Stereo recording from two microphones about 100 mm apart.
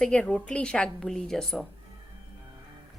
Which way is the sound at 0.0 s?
10° left (ahead or behind).